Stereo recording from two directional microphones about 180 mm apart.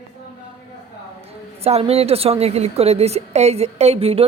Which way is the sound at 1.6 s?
35° right (ahead or behind).